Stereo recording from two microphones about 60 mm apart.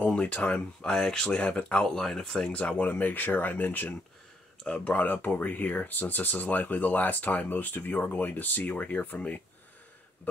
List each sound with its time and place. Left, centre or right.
0.0 s speech: centre
2.5 s speech: left